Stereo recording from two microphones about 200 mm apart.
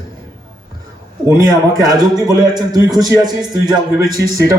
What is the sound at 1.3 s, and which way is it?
A man's voice, 20° right (ahead or behind).